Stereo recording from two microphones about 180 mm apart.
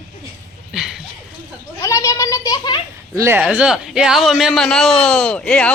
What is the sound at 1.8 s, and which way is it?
Children playing, 15° left (ahead or behind).